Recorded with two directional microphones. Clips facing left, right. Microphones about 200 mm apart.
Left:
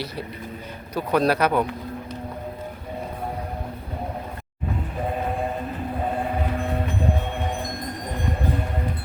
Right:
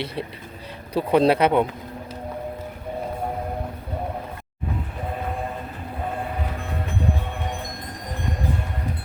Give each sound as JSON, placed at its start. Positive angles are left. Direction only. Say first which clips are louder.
{"t": 0.9, "sound": "speech", "louder": "right 3 dB", "side_deg": -25}